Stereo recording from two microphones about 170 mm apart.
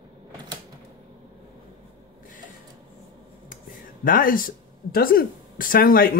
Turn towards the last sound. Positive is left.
turn(degrees=55)  # may be behind; listen again after turning